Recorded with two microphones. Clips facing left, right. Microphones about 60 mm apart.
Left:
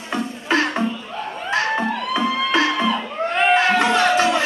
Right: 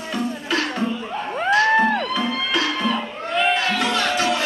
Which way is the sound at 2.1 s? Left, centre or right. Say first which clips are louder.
Left 3 dB; left.